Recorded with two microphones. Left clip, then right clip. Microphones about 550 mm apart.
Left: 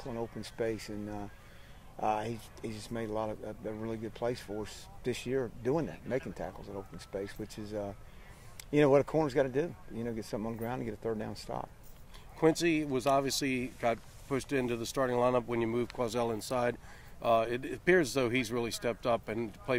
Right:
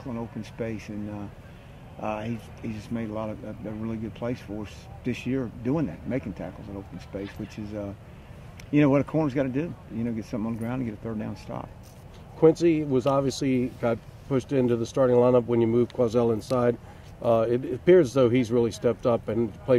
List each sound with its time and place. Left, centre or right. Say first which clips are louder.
0.6 s speech: right 1 dB; left
12.4 s speech: right 8 dB; centre